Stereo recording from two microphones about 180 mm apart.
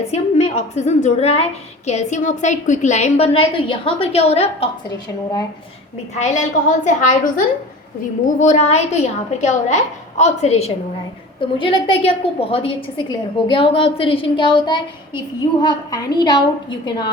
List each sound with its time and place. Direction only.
0.0 s a woman's voice: 35° left (ahead or behind)
4.9 s a woman's voice: 20° left (ahead or behind)
6.1 s a woman's voice: 40° left (ahead or behind)
8.4 s a woman's voice: 40° left (ahead or behind); by 17.1 s 25° left (ahead or behind)